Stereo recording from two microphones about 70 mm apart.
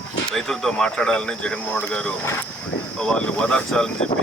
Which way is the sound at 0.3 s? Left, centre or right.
Centre.